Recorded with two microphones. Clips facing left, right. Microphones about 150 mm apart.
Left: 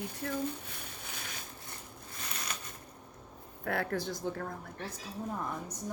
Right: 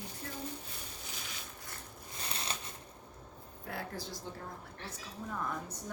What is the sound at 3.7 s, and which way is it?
Speech, 60° left (ahead or behind).